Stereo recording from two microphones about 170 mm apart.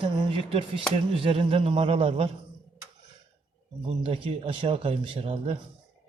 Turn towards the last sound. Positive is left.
turn(degrees=-35)  # may be behind; listen again after turning